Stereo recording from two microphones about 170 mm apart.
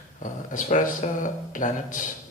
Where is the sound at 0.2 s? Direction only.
50° left (ahead or behind).